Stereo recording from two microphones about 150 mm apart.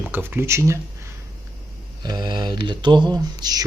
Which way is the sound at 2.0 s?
30° right (ahead or behind).